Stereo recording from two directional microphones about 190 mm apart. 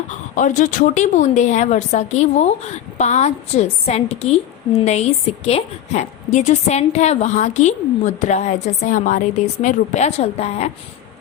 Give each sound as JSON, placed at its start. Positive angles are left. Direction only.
{"t": 0.1, "sound": "a woman's voice", "side_deg": 40}